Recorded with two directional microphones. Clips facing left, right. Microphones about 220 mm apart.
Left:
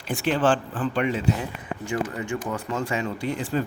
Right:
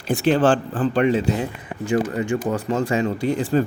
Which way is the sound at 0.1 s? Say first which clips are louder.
Right 5 dB; 40° right (ahead or behind).